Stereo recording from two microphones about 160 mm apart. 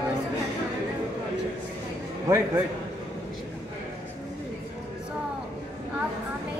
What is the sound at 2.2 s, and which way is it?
Speech, 20° right (ahead or behind).